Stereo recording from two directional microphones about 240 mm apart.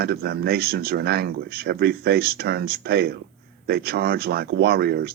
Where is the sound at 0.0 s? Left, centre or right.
Right.